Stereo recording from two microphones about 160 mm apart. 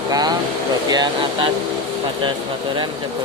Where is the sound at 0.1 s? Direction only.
25° right (ahead or behind).